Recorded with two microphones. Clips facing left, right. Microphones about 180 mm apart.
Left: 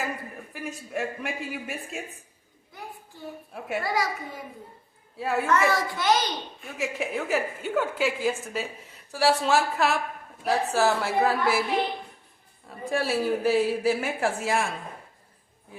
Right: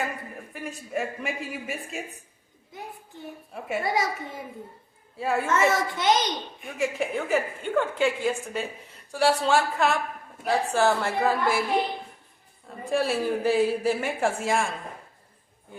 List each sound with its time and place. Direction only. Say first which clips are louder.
0.5 s a woman's voice: right 1 dB; centre (ahead or behind)
2.7 s a sound: right 2 dB; 20° right (ahead or behind)
3.5 s a woman's voice: right 3 dB; centre (ahead or behind)
3.8 s a child's voice: right 1 dB; 25° right (ahead or behind)
5.1 s a woman's voice: right 1 dB; centre (ahead or behind)
5.7 s a child's voice: right 1 dB; 20° right (ahead or behind)
6.7 s a woman's voice: right 2 dB; centre (ahead or behind)
12.6 s a woman's voice: right 2 dB; centre (ahead or behind)